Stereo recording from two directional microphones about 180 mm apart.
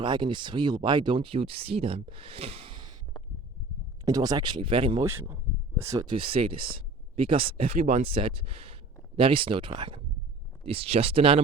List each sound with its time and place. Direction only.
0.0 s speech: 25° right (ahead or behind)
4.0 s speech: 20° right (ahead or behind)
5.0 s speech: 10° right (ahead or behind); by 11.3 s 30° right (ahead or behind)